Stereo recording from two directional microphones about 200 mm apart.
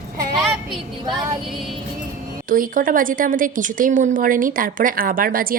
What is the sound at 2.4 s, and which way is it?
Speech, 45° right (ahead or behind).